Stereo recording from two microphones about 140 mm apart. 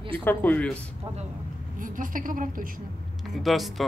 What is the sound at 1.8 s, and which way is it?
Speech, 75° right (ahead or behind).